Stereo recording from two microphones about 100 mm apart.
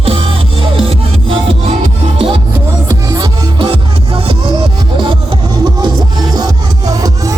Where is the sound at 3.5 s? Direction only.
60° right (ahead or behind).